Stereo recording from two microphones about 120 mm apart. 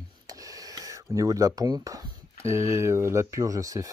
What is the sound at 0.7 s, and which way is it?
Speech, 30° right (ahead or behind).